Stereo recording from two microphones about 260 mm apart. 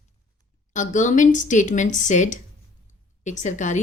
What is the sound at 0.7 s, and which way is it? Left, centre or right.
A woman's voice, left.